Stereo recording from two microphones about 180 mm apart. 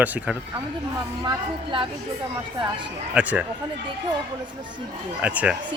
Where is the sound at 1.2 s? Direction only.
25° right (ahead or behind).